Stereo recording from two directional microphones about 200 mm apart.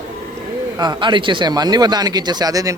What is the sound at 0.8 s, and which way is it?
Speech, 20° right (ahead or behind).